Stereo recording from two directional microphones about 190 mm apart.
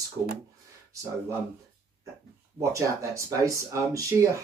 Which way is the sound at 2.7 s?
15° right (ahead or behind).